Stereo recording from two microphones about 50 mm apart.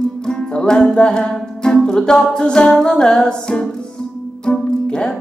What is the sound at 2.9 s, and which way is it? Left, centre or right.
Music, centre.